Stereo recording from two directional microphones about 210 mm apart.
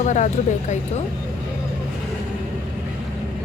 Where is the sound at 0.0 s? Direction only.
35° left (ahead or behind).